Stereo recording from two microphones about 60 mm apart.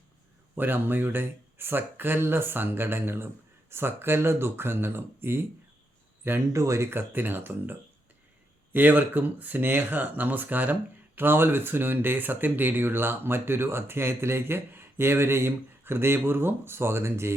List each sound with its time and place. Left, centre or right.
0.5 s speech: right
6.5 s speech: right
6.9 s speech: right